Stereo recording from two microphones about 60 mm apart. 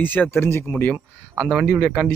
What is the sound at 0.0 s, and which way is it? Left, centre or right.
Speech, left.